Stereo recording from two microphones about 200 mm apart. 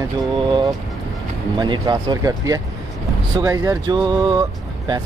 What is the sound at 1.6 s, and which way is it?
Speech, 20° right (ahead or behind).